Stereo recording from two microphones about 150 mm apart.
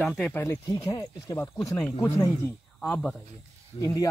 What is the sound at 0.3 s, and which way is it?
Speech, 15° left (ahead or behind).